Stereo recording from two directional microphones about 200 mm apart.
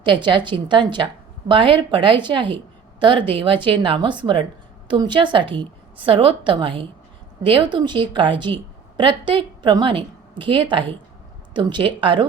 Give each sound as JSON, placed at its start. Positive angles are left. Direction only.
{"t": 0.0, "sound": "a woman's voice", "side_deg": -25}